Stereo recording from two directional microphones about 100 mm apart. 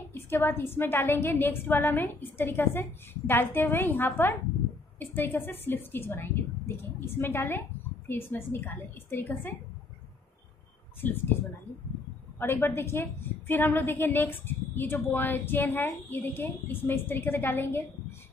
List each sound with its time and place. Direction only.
0.1 s a woman's voice: 20° left (ahead or behind)
11.0 s a woman's voice: 20° left (ahead or behind)
12.4 s a woman's voice: 20° left (ahead or behind)